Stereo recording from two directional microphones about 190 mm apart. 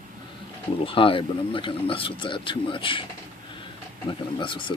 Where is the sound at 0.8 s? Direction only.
30° left (ahead or behind).